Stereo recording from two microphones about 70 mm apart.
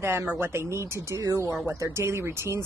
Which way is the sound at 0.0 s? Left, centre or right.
Right.